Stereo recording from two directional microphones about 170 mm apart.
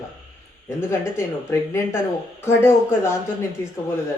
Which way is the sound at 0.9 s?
15° left (ahead or behind).